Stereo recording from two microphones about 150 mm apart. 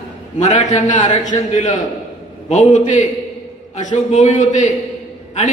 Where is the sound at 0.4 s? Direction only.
50° left (ahead or behind).